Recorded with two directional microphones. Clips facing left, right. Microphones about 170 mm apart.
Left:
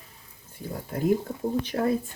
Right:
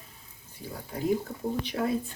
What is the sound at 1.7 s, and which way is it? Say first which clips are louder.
Speech: left 4 dB; 45° left (ahead or behind).